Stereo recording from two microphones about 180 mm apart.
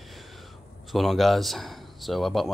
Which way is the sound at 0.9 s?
Centre (ahead or behind).